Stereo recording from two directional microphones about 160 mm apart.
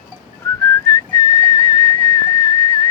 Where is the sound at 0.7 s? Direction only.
20° left (ahead or behind).